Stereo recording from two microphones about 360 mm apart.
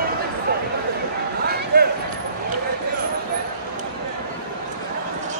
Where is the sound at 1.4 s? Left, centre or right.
Right.